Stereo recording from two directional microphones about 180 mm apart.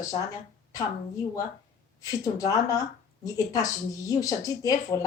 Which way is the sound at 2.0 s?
20° left (ahead or behind).